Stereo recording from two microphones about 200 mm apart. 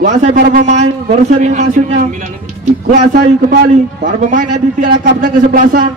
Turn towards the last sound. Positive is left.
turn(degrees=-40)  # may be behind; listen again after turning